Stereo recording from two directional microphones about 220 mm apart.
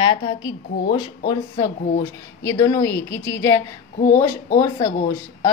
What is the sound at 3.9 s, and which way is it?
Speech, 35° left (ahead or behind).